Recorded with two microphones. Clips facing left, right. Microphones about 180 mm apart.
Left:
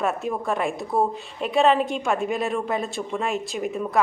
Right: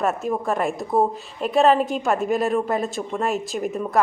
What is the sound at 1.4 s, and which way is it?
A woman's voice, centre (ahead or behind).